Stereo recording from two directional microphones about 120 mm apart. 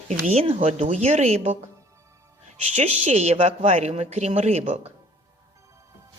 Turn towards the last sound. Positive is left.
turn(degrees=-60)  # may be behind; listen again after turning